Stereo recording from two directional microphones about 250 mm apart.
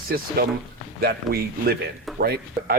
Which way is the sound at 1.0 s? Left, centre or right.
Right.